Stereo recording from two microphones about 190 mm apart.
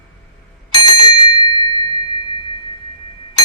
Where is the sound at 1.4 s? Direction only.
25° left (ahead or behind).